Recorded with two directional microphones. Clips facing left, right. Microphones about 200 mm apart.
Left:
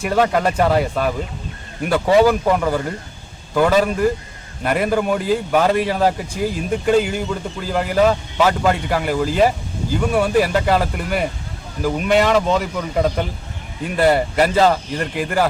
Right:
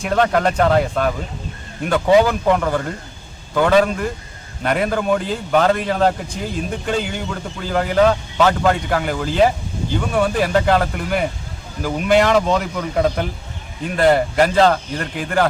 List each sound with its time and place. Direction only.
0.0 s a man's voice: 5° left (ahead or behind)